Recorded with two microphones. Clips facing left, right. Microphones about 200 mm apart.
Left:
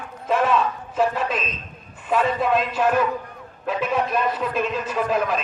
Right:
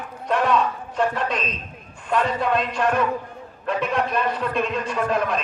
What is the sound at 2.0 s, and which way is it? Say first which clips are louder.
A man's voice: left 1 dB; 5° left (ahead or behind).